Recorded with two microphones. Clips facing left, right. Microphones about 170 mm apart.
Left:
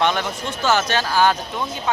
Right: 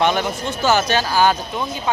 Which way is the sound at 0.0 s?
5° right (ahead or behind).